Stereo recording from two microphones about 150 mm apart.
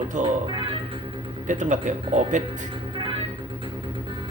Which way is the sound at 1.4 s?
55° right (ahead or behind).